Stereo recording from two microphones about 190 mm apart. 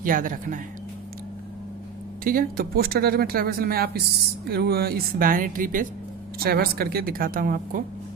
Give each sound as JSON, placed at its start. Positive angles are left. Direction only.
{"t": 0.0, "sound": "speech", "side_deg": -45}
{"t": 2.2, "sound": "speech", "side_deg": -50}